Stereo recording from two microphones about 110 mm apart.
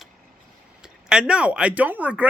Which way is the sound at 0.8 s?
5° right (ahead or behind).